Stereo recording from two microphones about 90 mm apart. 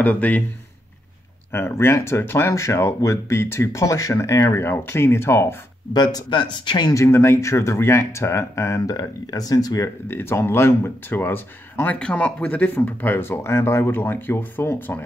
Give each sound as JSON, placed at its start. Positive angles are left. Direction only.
{"t": 0.0, "sound": "speech", "side_deg": 20}
{"t": 1.5, "sound": "speech", "side_deg": 25}
{"t": 5.9, "sound": "speech", "side_deg": 50}
{"t": 6.9, "sound": "speech", "side_deg": 35}
{"t": 10.0, "sound": "speech", "side_deg": 25}